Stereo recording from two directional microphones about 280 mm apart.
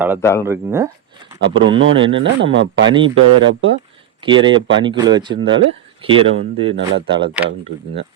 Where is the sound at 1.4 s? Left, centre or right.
Right.